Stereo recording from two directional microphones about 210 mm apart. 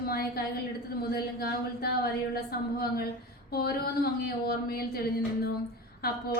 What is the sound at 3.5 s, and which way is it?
Speech, 45° left (ahead or behind).